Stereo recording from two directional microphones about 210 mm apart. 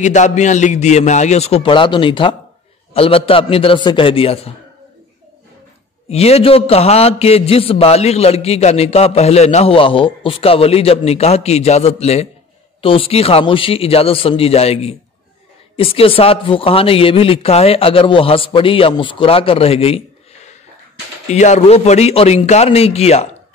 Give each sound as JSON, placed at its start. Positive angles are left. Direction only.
{"t": 0.0, "sound": "a man's voice", "side_deg": 35}
{"t": 6.0, "sound": "a man's voice", "side_deg": 30}
{"t": 21.3, "sound": "a man's voice", "side_deg": 35}